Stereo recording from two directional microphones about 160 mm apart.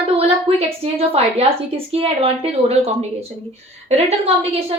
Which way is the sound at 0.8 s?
40° right (ahead or behind).